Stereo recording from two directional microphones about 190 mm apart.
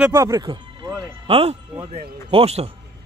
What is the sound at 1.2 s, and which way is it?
Speech, 30° right (ahead or behind).